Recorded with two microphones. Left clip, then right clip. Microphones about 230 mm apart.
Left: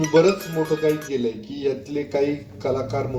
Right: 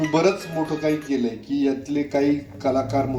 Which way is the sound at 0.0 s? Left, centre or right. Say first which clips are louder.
Left 3 dB; left.